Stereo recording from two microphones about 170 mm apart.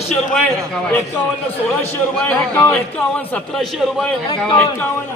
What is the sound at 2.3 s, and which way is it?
A man's voice, 10° left (ahead or behind).